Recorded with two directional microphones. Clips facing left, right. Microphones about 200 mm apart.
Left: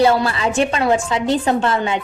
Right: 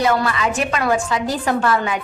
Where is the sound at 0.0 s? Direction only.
30° left (ahead or behind).